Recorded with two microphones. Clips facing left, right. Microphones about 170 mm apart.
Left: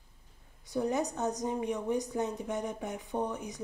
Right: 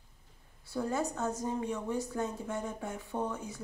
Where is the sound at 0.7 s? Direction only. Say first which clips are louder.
Left 2 dB; 20° left (ahead or behind).